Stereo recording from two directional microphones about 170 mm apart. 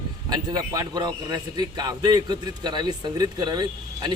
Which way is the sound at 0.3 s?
25° right (ahead or behind).